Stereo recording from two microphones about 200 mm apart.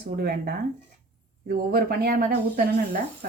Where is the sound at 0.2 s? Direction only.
50° right (ahead or behind).